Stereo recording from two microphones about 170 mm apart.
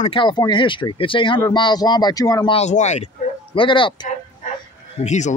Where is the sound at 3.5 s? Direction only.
30° left (ahead or behind).